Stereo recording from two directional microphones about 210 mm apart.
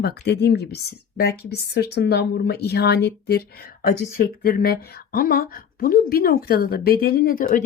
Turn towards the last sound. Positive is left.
turn(degrees=40)  # may be behind; listen again after turning